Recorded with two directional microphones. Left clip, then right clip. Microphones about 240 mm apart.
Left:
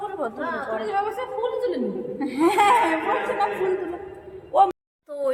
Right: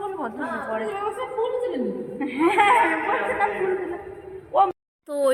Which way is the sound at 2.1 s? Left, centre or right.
Centre.